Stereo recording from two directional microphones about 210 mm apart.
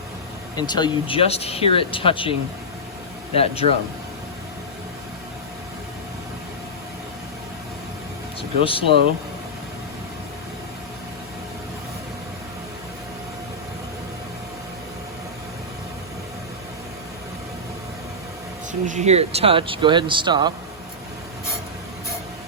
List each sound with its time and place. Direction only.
0.5 s speech: 20° left (ahead or behind)
3.3 s speech: 30° left (ahead or behind)
8.4 s speech: 25° left (ahead or behind)
18.7 s speech: 35° right (ahead or behind)